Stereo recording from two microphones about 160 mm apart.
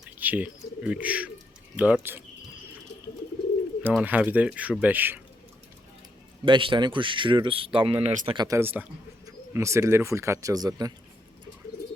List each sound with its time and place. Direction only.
0.2 s speech: 10° right (ahead or behind)
3.8 s speech: 10° right (ahead or behind)
6.4 s speech: 30° right (ahead or behind)
8.5 s speech: 10° right (ahead or behind)